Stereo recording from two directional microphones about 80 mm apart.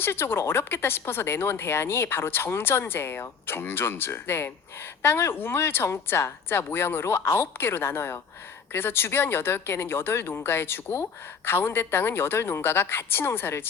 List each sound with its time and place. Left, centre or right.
0.0 s a woman's voice: left